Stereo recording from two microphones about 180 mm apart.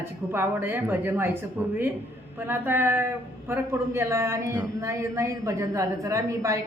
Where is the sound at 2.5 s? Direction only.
10° right (ahead or behind).